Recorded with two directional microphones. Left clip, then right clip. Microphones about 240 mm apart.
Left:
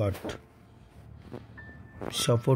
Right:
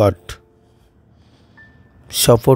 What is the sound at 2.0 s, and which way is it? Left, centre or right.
Speech, right.